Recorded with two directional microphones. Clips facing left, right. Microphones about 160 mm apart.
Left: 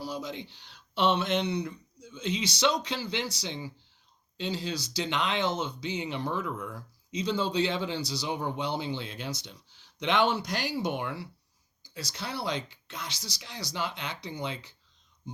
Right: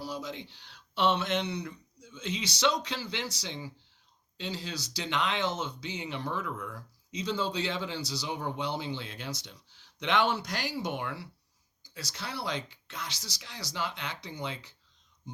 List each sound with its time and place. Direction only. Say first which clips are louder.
0.1 s a man's voice: left 2 dB; 20° left (ahead or behind)